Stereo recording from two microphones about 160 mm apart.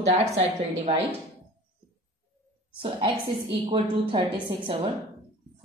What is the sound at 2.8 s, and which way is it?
A woman's voice, 30° right (ahead or behind).